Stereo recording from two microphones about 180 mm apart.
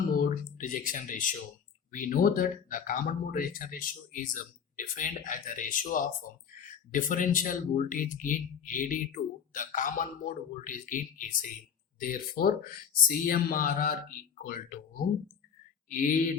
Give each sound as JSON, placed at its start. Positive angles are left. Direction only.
{"t": 0.2, "sound": "speech", "side_deg": 50}